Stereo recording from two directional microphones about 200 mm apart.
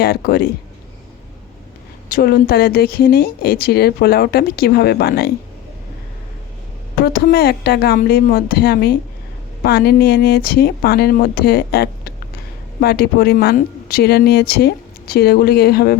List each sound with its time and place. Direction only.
0.0 s speech: 50° left (ahead or behind)
2.1 s speech: 50° left (ahead or behind)
7.0 s speech: 50° left (ahead or behind)